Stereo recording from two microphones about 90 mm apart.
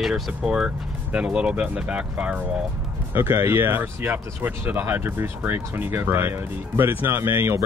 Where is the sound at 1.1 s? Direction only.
10° right (ahead or behind).